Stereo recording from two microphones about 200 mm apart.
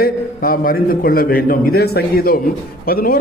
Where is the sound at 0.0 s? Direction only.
45° left (ahead or behind).